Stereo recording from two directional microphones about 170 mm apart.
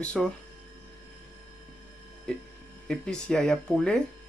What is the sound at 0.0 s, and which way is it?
Speech, 5° left (ahead or behind).